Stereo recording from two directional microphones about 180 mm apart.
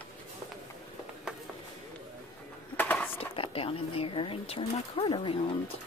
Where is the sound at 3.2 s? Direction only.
30° left (ahead or behind).